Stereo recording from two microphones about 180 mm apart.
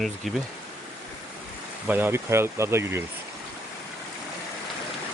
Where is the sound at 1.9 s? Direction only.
10° right (ahead or behind).